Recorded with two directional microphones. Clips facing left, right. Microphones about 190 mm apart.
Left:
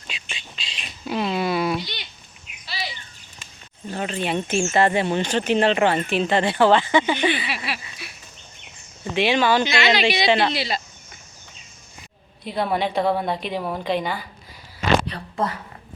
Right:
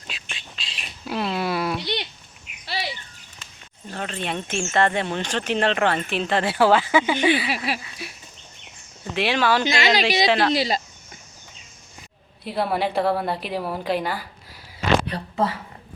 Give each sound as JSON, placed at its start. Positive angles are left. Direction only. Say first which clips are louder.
{"t": 0.1, "sound": "bird", "louder": "left 1 dB", "side_deg": 0}
{"t": 1.8, "sound": "a sound", "louder": "right 8 dB", "side_deg": -65}
{"t": 2.6, "sound": "bird", "louder": "right 3 dB", "side_deg": -65}
{"t": 3.9, "sound": "speech", "louder": "left 4 dB", "side_deg": 5}
{"t": 7.5, "sound": "speech", "louder": "right 3 dB", "side_deg": -40}
{"t": 9.1, "sound": "speech", "louder": "left 2 dB", "side_deg": 0}
{"t": 9.6, "sound": "speech", "louder": "left 1 dB", "side_deg": -40}
{"t": 10.2, "sound": "speech", "louder": "left 1 dB", "side_deg": 0}
{"t": 10.5, "sound": "speech", "louder": "right 4 dB", "side_deg": -40}
{"t": 12.5, "sound": "speech", "louder": "even", "side_deg": -5}